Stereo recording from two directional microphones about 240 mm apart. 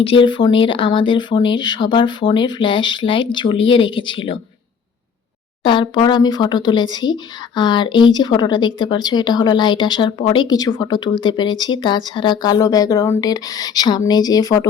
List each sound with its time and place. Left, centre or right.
0.0 s speech: left
5.6 s speech: centre